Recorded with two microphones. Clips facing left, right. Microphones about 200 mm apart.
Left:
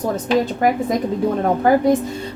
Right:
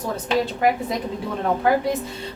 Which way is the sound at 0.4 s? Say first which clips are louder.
Left 3 dB; 45° left (ahead or behind).